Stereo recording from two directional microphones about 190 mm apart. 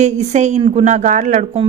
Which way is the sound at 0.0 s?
35° right (ahead or behind).